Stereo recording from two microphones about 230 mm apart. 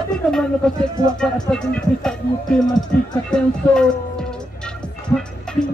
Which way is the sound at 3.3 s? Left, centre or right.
Centre.